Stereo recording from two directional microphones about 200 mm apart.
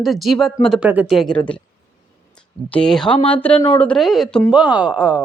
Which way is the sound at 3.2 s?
25° left (ahead or behind).